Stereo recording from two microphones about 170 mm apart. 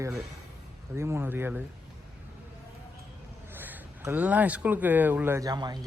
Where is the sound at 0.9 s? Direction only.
15° right (ahead or behind).